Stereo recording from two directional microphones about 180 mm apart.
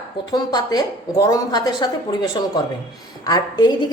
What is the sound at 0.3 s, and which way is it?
A woman's voice, 20° left (ahead or behind).